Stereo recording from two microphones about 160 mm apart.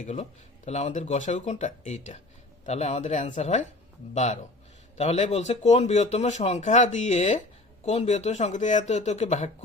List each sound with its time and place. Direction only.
0.0 s speech: 45° left (ahead or behind)